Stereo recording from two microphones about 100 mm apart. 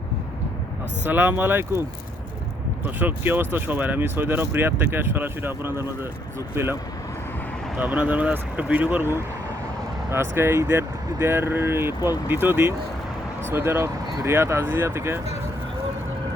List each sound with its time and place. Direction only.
1.0 s speech: 20° right (ahead or behind)
2.8 s speech: 20° right (ahead or behind)
7.8 s speech: 15° right (ahead or behind)